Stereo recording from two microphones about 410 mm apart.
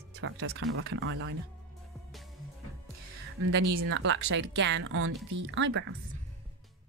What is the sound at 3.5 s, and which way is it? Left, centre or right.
Speech, right.